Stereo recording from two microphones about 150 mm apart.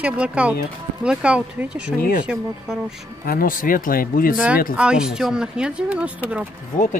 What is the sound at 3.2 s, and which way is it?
Speech, 75° left (ahead or behind).